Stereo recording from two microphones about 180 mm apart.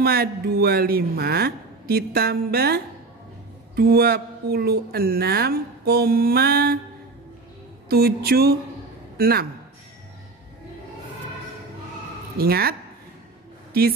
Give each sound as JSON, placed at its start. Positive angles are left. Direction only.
{"t": 0.0, "sound": "a woman's voice", "side_deg": -60}
{"t": 7.9, "sound": "a woman's voice", "side_deg": -60}
{"t": 12.4, "sound": "a woman's voice", "side_deg": -55}